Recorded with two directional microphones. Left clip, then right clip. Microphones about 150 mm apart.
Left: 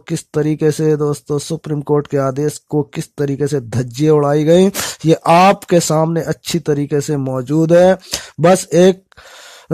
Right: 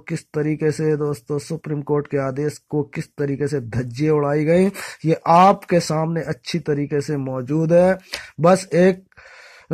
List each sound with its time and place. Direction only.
0.1 s speech: 45° left (ahead or behind)